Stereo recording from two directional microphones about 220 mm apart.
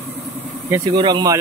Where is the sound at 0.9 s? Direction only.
20° right (ahead or behind).